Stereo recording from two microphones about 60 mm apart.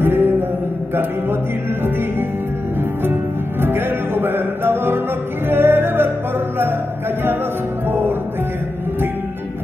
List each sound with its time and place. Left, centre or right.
0.0 s mantra: right
3.6 s music: right